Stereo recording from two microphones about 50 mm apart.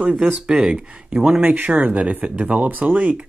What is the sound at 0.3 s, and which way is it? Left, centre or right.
Speech, centre.